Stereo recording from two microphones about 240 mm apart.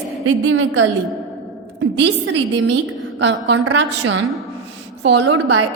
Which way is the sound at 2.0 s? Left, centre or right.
Right.